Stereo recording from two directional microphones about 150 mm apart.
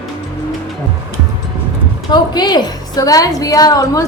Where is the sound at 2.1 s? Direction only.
30° left (ahead or behind).